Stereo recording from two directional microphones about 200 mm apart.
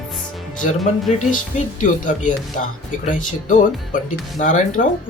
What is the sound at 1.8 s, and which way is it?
Speech, 40° left (ahead or behind).